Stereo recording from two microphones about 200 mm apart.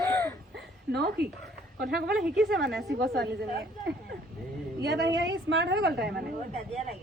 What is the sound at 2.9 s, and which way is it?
A woman's voice, 55° right (ahead or behind).